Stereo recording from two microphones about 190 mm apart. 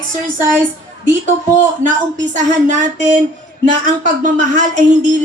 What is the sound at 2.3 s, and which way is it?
Speech, 40° right (ahead or behind).